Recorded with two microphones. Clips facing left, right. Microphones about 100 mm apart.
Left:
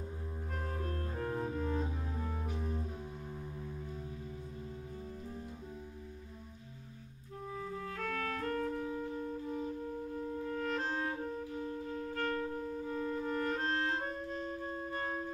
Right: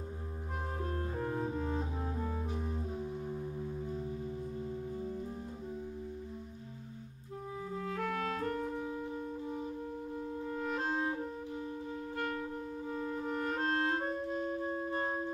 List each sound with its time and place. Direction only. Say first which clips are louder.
0.7 s clarinet: right 4 dB; 20° right (ahead or behind)
1.2 s music: left 1 dB; 10° right (ahead or behind)
7.5 s clarinet: right 3 dB; 15° right (ahead or behind)
10.4 s clarinet: right 1 dB; 10° right (ahead or behind)